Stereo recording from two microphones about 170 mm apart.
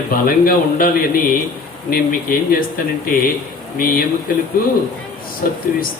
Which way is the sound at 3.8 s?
60° left (ahead or behind).